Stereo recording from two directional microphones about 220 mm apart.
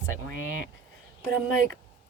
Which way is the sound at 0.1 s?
65° left (ahead or behind).